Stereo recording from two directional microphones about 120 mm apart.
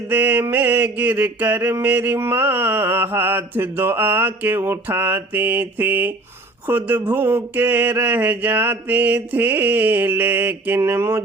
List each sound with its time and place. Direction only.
0.1 s mantra: 15° right (ahead or behind)